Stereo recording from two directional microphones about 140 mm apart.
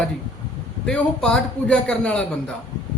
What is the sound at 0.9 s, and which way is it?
A man's voice, 5° left (ahead or behind).